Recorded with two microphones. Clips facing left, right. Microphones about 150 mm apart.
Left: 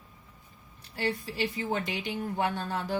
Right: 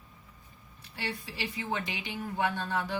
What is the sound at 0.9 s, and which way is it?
A woman's voice, 45° left (ahead or behind).